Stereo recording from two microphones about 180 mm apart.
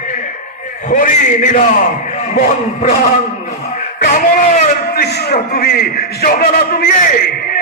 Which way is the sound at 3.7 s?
45° left (ahead or behind).